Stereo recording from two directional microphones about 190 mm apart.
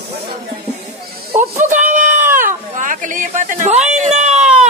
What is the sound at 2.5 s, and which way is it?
Speech, 45° right (ahead or behind).